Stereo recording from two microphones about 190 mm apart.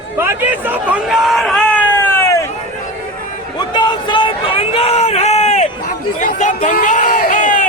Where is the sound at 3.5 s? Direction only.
20° left (ahead or behind); by 7.6 s 40° left (ahead or behind).